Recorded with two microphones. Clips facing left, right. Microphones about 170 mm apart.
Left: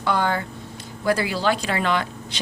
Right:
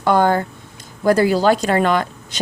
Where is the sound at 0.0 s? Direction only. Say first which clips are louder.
Right 7 dB; 45° right (ahead or behind).